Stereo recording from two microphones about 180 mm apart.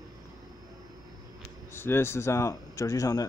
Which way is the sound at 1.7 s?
15° left (ahead or behind).